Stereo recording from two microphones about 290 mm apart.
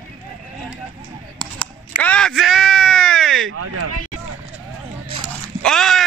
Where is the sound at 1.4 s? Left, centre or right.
Centre.